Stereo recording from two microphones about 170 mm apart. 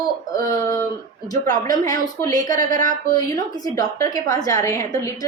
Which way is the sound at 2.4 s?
50° right (ahead or behind).